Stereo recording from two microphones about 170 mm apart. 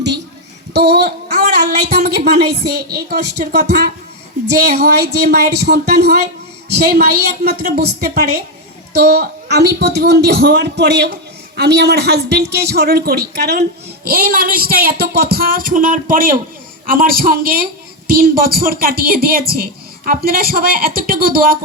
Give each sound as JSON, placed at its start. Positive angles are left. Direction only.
{"t": 0.7, "sound": "a woman's voice", "side_deg": -75}